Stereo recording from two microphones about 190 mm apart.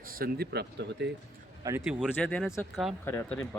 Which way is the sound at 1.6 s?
10° right (ahead or behind).